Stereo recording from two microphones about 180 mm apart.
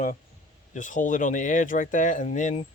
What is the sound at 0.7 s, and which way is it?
Speech, 45° left (ahead or behind).